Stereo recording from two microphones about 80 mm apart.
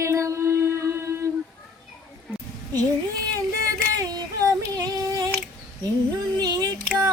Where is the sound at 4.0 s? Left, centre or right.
Right.